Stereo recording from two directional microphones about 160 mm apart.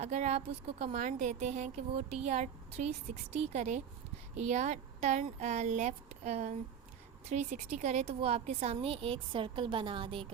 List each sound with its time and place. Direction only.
0.0 s speech: 45° right (ahead or behind)